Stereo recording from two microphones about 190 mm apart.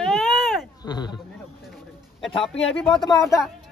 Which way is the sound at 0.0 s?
Centre (ahead or behind).